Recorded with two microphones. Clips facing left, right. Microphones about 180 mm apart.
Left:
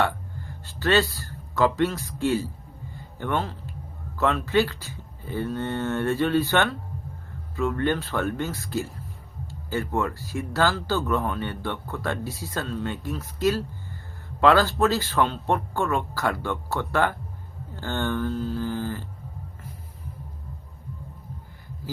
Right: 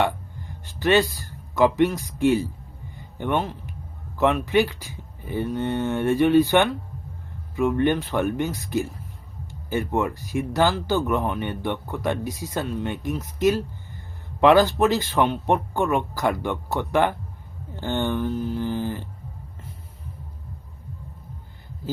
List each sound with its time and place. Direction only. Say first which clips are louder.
0.0 s speech: right 2 dB; 15° right (ahead or behind)
2.9 s a sound: right 3 dB; 15° right (ahead or behind)
4.2 s speech: right 2 dB; 15° right (ahead or behind)